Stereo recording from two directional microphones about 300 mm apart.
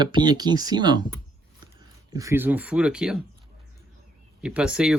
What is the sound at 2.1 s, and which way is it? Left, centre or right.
Speech, centre.